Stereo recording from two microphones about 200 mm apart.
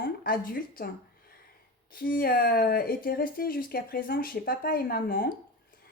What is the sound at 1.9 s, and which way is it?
Speech, 45° left (ahead or behind).